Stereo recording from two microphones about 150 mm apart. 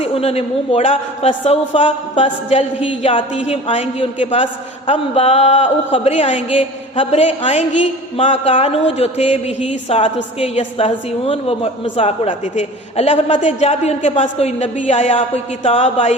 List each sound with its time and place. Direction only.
0.0 s a man's voice: 40° left (ahead or behind)